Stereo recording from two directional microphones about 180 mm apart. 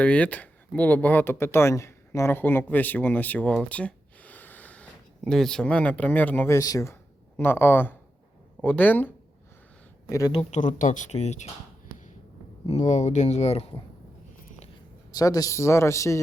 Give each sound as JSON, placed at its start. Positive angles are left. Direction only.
{"t": 0.0, "sound": "speech", "side_deg": 5}
{"t": 10.3, "sound": "speech", "side_deg": 45}
{"t": 12.6, "sound": "speech", "side_deg": 35}
{"t": 15.1, "sound": "speech", "side_deg": 20}